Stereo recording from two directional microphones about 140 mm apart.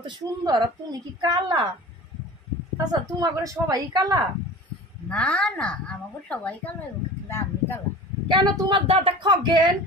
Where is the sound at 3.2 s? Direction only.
25° right (ahead or behind).